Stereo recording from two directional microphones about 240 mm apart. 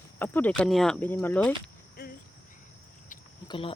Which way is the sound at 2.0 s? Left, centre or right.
Left.